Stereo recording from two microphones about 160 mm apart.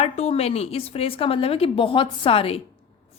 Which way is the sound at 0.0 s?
40° left (ahead or behind).